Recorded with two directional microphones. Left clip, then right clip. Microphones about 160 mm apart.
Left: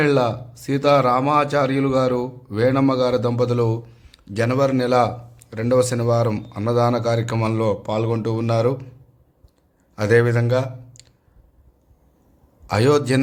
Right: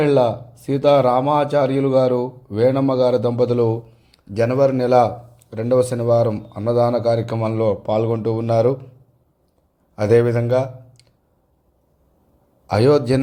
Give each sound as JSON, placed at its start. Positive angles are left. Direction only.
{"t": 0.0, "sound": "a man's voice", "side_deg": -10}
{"t": 9.9, "sound": "a man's voice", "side_deg": -15}
{"t": 12.6, "sound": "a man's voice", "side_deg": -15}